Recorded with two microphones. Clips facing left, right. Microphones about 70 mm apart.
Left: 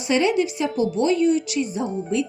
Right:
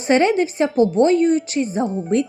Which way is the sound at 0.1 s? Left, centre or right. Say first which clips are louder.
Right 4 dB; right.